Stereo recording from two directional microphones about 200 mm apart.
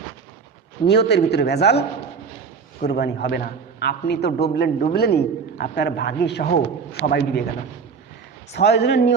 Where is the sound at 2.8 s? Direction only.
55° left (ahead or behind).